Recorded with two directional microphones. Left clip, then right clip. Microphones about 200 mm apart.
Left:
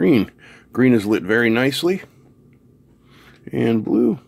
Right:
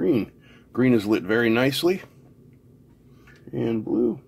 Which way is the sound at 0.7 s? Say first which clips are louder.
Left 4 dB; 25° left (ahead or behind).